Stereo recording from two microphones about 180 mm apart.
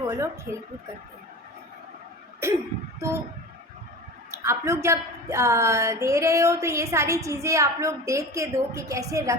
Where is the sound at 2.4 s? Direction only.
15° right (ahead or behind).